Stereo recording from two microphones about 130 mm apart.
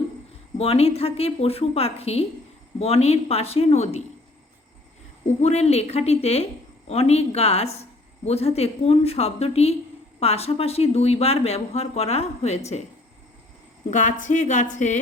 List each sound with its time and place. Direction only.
0.5 s speech: 50° left (ahead or behind)
5.4 s speech: 55° left (ahead or behind)
13.9 s speech: 70° left (ahead or behind)